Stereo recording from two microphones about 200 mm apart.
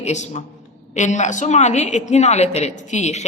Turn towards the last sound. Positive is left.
turn(degrees=35)  # may be behind; listen again after turning